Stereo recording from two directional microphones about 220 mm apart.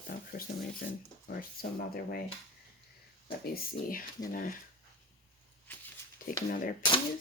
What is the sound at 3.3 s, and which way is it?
Speech, 40° left (ahead or behind).